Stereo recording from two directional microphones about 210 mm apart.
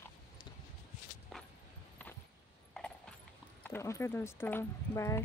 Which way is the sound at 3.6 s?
10° left (ahead or behind).